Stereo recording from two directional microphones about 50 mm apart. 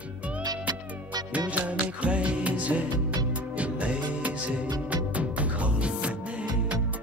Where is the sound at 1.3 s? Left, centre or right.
Right.